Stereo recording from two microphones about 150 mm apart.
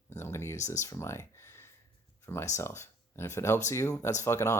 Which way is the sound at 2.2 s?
15° left (ahead or behind).